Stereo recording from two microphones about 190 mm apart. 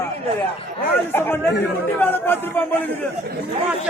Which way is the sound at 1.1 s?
10° left (ahead or behind).